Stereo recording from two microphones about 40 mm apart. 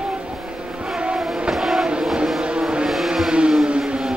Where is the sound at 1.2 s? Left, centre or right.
Centre.